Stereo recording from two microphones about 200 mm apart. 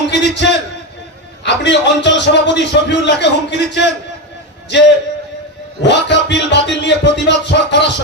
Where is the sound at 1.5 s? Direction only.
60° left (ahead or behind).